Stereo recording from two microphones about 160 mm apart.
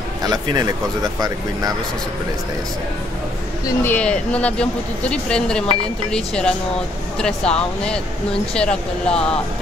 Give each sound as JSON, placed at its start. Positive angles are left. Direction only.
{"t": 0.2, "sound": "speech", "side_deg": -25}
{"t": 3.6, "sound": "speech", "side_deg": 10}